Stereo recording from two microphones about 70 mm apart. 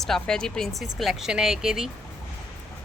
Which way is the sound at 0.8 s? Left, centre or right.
Centre.